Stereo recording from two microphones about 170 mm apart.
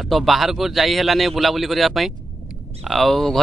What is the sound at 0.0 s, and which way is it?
A man's voice, centre (ahead or behind).